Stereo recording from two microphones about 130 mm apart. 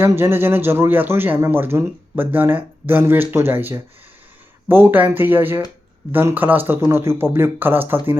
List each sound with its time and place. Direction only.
0.0 s speech: 20° right (ahead or behind)